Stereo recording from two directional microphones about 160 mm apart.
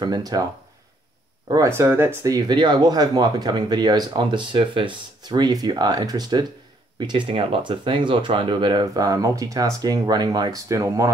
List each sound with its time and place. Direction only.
0.0 s speech: 25° right (ahead or behind)
1.5 s speech: 20° right (ahead or behind)